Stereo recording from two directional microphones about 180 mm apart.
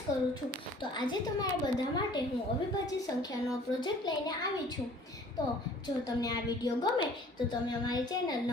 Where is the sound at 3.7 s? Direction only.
25° left (ahead or behind).